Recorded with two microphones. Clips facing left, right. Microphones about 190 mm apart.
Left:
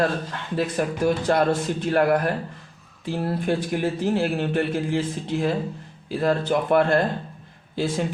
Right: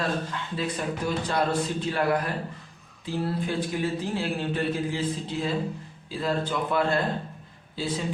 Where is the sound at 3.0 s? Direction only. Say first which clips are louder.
Left 3 dB; 60° left (ahead or behind).